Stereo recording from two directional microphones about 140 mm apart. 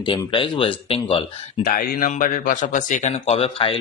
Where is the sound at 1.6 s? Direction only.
90° left; by 3.8 s 40° left (ahead or behind).